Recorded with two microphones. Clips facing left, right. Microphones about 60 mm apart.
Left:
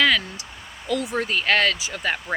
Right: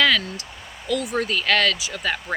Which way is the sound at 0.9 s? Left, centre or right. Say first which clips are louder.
Right 1 dB; left.